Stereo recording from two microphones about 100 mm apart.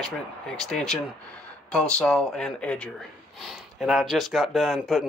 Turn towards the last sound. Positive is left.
turn(degrees=0)  # may be behind; listen again after turning